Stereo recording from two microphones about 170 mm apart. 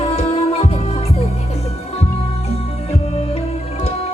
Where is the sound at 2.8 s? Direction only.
35° left (ahead or behind).